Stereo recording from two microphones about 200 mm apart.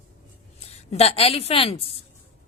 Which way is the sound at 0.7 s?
30° left (ahead or behind).